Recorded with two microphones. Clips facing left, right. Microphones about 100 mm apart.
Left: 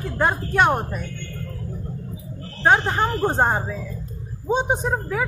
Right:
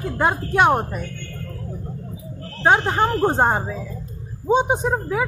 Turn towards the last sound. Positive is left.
turn(degrees=-10)  # may be behind; listen again after turning